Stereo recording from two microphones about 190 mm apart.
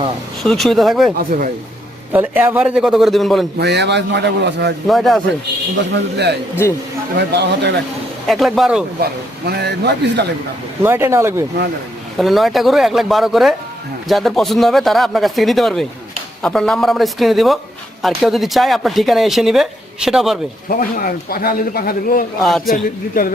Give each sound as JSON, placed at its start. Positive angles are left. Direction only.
{"t": 0.4, "sound": "speech", "side_deg": 0}
{"t": 1.2, "sound": "speech", "side_deg": -45}
{"t": 2.1, "sound": "speech", "side_deg": -10}
{"t": 3.6, "sound": "a man's voice", "side_deg": -65}
{"t": 4.9, "sound": "speech", "side_deg": 0}
{"t": 5.7, "sound": "a man's voice", "side_deg": -65}
{"t": 8.3, "sound": "speech", "side_deg": 0}
{"t": 9.5, "sound": "a man's voice", "side_deg": -60}
{"t": 10.8, "sound": "speech", "side_deg": -10}
{"t": 12.1, "sound": "speech", "side_deg": 0}
{"t": 20.7, "sound": "speech", "side_deg": 50}
{"t": 22.4, "sound": "speech", "side_deg": 0}
{"t": 22.7, "sound": "speech", "side_deg": 50}